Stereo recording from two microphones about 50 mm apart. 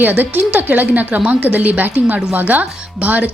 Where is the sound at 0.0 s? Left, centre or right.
Right.